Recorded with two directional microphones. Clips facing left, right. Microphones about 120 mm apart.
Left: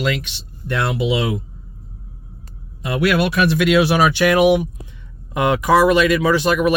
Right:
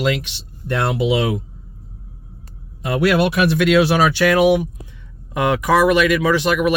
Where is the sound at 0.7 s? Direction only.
45° right (ahead or behind).